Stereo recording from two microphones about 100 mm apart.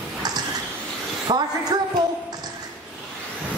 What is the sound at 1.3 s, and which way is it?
Speech, 50° right (ahead or behind).